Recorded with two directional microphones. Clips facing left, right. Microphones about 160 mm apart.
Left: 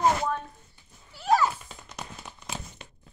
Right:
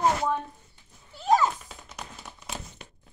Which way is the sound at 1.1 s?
20° right (ahead or behind).